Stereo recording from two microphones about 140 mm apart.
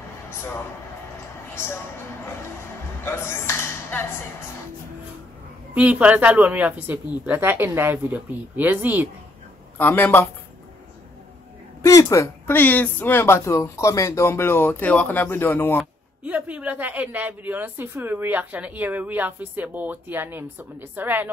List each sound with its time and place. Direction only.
1.5 s speech: 15° left (ahead or behind)
3.0 s speech: 15° left (ahead or behind)
5.8 s speech: 10° right (ahead or behind)
9.8 s a woman's voice: 15° left (ahead or behind)
11.8 s a woman's voice: 25° left (ahead or behind)
15.8 s speech: 10° right (ahead or behind)